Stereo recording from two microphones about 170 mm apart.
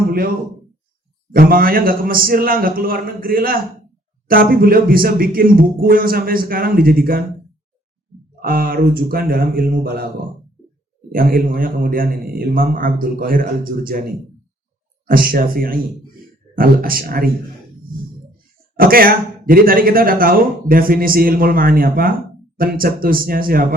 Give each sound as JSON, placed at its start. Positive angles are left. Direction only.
{"t": 1.3, "sound": "speech", "side_deg": -60}
{"t": 8.4, "sound": "speech", "side_deg": -60}
{"t": 11.1, "sound": "speech", "side_deg": -55}
{"t": 15.0, "sound": "speech", "side_deg": -55}
{"t": 18.8, "sound": "speech", "side_deg": -60}